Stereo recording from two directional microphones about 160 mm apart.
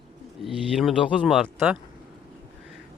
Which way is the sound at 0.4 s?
Centre (ahead or behind).